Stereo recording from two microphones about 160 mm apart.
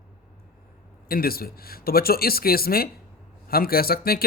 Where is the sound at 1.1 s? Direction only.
70° left (ahead or behind).